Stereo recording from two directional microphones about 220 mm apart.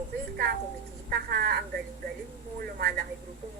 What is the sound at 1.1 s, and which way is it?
Speech, 45° right (ahead or behind).